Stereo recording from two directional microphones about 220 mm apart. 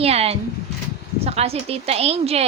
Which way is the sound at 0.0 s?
25° right (ahead or behind).